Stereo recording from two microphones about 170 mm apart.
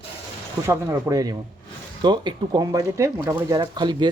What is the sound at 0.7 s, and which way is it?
Speech, 15° right (ahead or behind).